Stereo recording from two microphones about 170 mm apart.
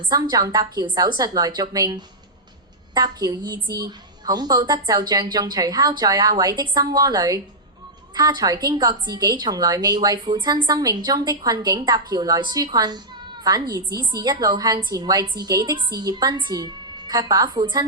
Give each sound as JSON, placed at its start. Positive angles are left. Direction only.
{"t": 0.1, "sound": "a woman's voice", "side_deg": -20}